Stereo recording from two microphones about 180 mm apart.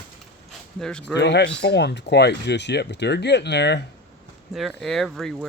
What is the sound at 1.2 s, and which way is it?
Speech, 70° left (ahead or behind).